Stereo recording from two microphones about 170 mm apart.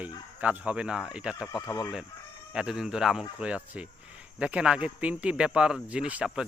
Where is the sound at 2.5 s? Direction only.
5° right (ahead or behind).